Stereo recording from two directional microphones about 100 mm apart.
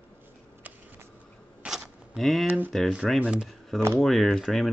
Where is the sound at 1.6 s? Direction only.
5° right (ahead or behind).